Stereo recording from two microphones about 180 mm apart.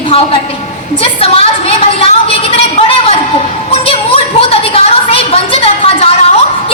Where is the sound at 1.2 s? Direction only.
30° left (ahead or behind).